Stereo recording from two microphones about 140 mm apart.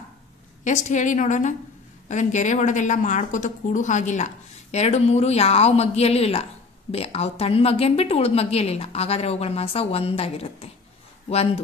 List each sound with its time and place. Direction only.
0.7 s speech: 60° left (ahead or behind); by 11.6 s 45° left (ahead or behind)